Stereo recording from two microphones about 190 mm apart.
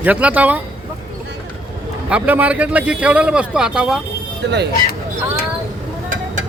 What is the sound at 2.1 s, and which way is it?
A man's voice, 5° right (ahead or behind).